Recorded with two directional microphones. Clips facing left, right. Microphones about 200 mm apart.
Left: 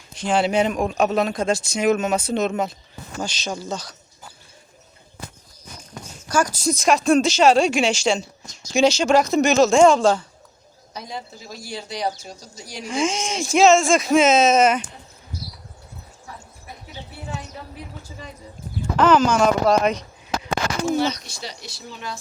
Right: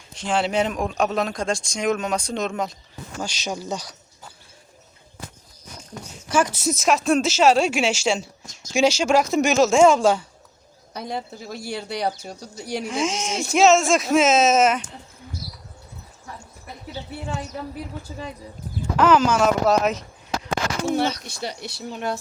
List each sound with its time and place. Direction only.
0.1 s speech: centre (ahead or behind)
3.2 s speech: 10° right (ahead or behind)
6.3 s speech: 5° right (ahead or behind)
10.9 s speech: 60° right (ahead or behind)
12.8 s speech: centre (ahead or behind)
18.9 s speech: 10° right (ahead or behind)
21.2 s speech: 55° right (ahead or behind)